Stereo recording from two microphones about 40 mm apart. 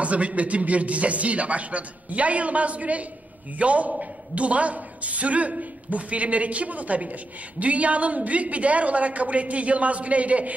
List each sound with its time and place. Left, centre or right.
0.0 s a man's voice: right